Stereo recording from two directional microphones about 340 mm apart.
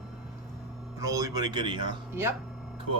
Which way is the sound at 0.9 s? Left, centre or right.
Centre.